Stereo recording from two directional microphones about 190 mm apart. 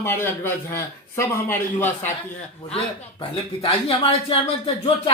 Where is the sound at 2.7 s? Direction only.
30° left (ahead or behind).